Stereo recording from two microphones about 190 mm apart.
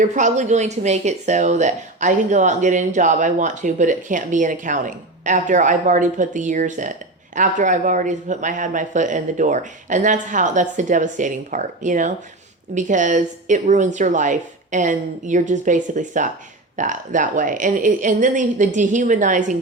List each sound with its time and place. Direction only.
0.0 s a woman's voice: 40° right (ahead or behind)